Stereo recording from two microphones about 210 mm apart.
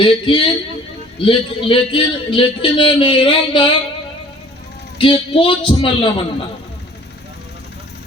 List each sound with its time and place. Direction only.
0.0 s speech: 25° left (ahead or behind)
4.9 s speech: 25° left (ahead or behind)